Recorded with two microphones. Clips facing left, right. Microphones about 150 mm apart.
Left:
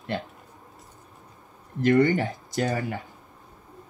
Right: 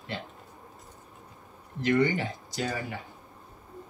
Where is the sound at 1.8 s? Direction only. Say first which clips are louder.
Left 5 dB; 45° left (ahead or behind).